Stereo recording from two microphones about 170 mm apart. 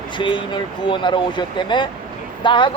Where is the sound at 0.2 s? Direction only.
30° left (ahead or behind).